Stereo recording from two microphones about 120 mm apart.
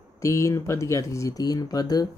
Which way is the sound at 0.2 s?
25° left (ahead or behind).